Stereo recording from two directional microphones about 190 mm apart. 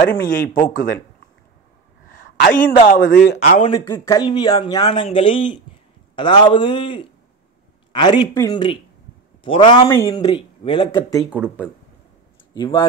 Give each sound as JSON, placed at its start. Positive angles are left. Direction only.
{"t": 0.2, "sound": "speech", "side_deg": 45}
{"t": 2.0, "sound": "a sound", "side_deg": 45}
{"t": 2.3, "sound": "speech", "side_deg": 50}
{"t": 3.1, "sound": "speech", "side_deg": 60}
{"t": 3.3, "sound": "a man's voice", "side_deg": 35}
{"t": 3.7, "sound": "speech", "side_deg": 15}
{"t": 12.5, "sound": "speech", "side_deg": 25}